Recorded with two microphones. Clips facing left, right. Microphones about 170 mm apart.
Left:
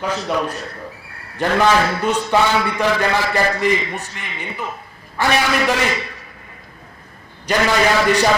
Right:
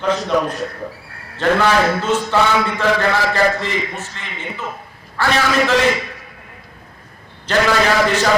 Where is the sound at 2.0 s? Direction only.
15° left (ahead or behind).